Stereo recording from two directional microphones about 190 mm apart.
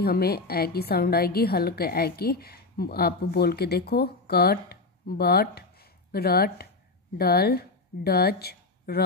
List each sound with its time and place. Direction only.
0.0 s a woman's voice: 55° left (ahead or behind)